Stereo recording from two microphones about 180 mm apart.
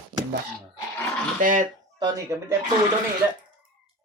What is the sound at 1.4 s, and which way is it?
Speech, 45° right (ahead or behind).